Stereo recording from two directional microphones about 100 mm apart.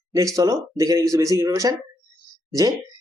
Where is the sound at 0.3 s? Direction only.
35° right (ahead or behind).